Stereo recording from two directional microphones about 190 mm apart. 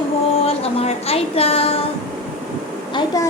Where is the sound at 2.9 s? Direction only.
20° left (ahead or behind).